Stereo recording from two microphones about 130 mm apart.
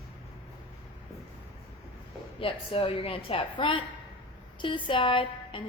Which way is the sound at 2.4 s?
45° left (ahead or behind).